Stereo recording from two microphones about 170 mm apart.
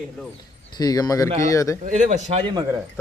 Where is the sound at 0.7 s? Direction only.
25° left (ahead or behind).